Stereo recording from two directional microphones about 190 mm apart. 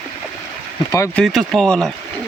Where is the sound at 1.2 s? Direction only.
Centre (ahead or behind).